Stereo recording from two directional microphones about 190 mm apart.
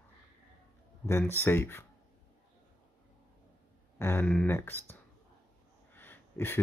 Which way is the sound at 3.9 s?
10° left (ahead or behind).